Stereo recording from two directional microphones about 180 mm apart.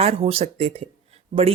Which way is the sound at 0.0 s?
35° right (ahead or behind).